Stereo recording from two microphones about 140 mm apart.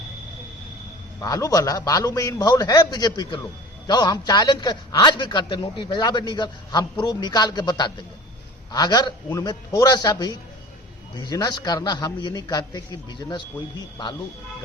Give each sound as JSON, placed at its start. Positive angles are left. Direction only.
{"t": 1.2, "sound": "a man's voice", "side_deg": 25}